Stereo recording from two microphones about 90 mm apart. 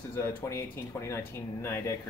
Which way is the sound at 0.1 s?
25° left (ahead or behind).